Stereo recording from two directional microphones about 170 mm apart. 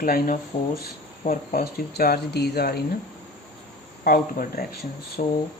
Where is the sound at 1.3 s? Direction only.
60° left (ahead or behind).